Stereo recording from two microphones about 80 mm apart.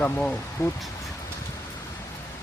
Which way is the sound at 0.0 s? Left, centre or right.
Centre.